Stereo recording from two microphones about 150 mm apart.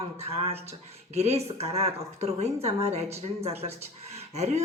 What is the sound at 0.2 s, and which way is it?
A man's voice, 45° right (ahead or behind).